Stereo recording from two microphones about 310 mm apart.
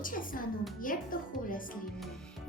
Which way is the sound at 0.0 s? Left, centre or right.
Left.